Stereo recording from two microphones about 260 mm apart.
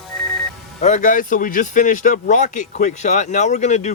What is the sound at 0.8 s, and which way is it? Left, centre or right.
A man's voice, left.